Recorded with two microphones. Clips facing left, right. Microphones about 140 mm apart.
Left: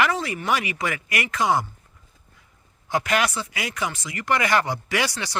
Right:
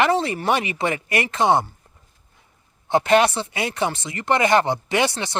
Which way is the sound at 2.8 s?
25° right (ahead or behind).